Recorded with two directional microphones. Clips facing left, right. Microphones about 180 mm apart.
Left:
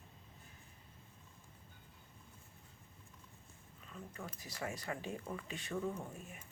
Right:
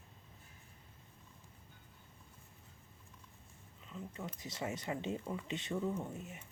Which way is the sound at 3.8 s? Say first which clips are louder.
Right 3 dB; 20° right (ahead or behind).